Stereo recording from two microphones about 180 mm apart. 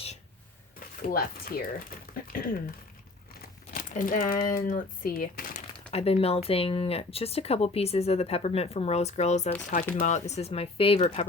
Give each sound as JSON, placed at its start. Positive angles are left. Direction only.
{"t": 1.0, "sound": "speech", "side_deg": 55}
{"t": 2.1, "sound": "a sound", "side_deg": 50}
{"t": 3.7, "sound": "crumpling", "side_deg": 50}
{"t": 4.6, "sound": "speech", "side_deg": 50}
{"t": 5.9, "sound": "speech", "side_deg": 35}